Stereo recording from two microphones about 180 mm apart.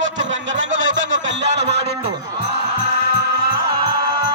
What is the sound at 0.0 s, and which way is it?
Music, 90° right.